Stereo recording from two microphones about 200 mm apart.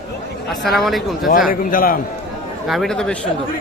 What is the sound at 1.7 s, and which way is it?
Speech, 45° left (ahead or behind).